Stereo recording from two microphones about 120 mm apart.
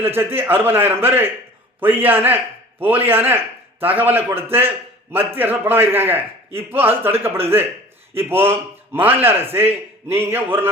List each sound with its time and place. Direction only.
0.0 s a man's voice: 20° right (ahead or behind)